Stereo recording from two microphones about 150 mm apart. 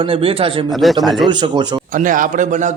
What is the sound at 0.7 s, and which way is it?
Speech, centre (ahead or behind).